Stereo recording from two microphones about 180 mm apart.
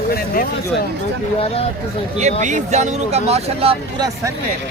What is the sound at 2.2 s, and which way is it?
Speech, 40° right (ahead or behind).